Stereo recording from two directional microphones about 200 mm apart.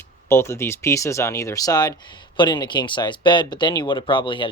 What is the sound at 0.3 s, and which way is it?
Speech, 10° left (ahead or behind).